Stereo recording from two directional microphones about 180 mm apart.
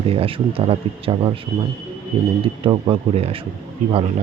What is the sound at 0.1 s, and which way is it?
Speech, 30° right (ahead or behind).